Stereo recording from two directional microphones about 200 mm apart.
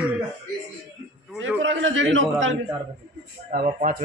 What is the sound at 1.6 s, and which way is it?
Speech, 75° right (ahead or behind).